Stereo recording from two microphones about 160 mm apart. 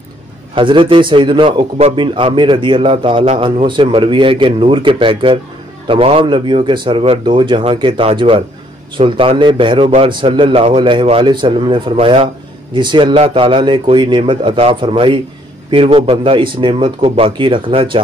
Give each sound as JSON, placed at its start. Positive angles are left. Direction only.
{"t": 0.6, "sound": "a man's voice", "side_deg": -30}